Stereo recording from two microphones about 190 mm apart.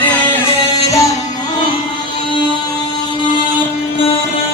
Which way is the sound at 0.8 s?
15° left (ahead or behind).